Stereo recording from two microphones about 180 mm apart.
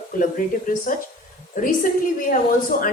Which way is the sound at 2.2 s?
50° left (ahead or behind).